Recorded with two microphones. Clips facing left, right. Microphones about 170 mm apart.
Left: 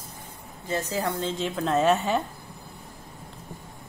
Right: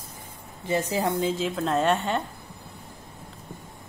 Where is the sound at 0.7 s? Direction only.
15° right (ahead or behind).